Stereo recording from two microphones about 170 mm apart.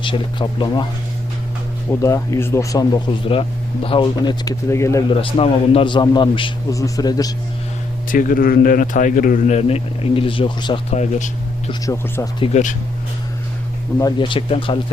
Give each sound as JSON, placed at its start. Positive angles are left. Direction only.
{"t": 0.0, "sound": "speech", "side_deg": 30}
{"t": 1.9, "sound": "speech", "side_deg": 20}
{"t": 5.0, "sound": "speech", "side_deg": 35}
{"t": 8.1, "sound": "a man's voice", "side_deg": 55}
{"t": 10.9, "sound": "a man's voice", "side_deg": 40}
{"t": 11.7, "sound": "speech", "side_deg": 15}
{"t": 14.0, "sound": "speech", "side_deg": 30}